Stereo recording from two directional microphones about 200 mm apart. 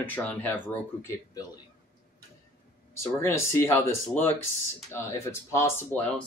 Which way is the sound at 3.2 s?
10° left (ahead or behind).